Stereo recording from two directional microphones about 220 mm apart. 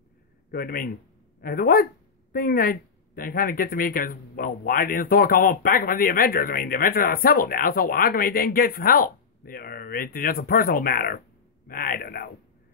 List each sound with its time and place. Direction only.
0.5 s speech: 40° left (ahead or behind)